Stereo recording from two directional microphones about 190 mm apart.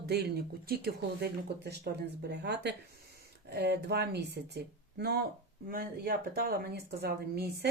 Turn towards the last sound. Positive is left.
turn(degrees=-55)  # may be behind; listen again after turning